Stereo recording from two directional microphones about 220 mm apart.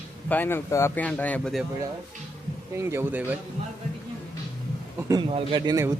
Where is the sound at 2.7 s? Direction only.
10° right (ahead or behind).